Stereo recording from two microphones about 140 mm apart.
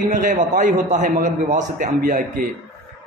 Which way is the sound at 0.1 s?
65° right (ahead or behind).